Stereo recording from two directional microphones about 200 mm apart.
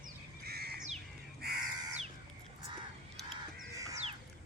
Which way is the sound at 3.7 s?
15° right (ahead or behind).